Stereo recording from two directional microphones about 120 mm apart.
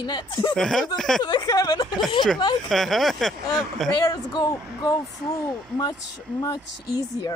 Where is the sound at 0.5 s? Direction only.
5° left (ahead or behind).